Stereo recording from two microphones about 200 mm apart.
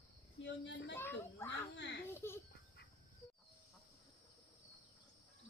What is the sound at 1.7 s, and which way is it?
Baby laughter, 65° left (ahead or behind).